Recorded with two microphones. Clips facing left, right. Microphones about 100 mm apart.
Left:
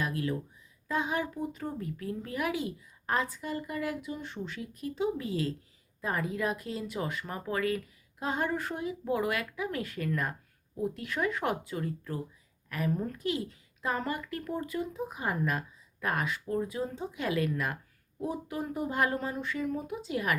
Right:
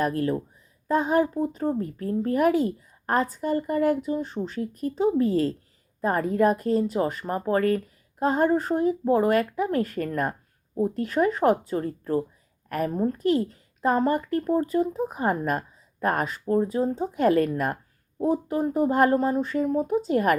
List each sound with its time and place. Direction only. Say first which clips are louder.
0.0 s speech: right 8 dB; 45° right (ahead or behind)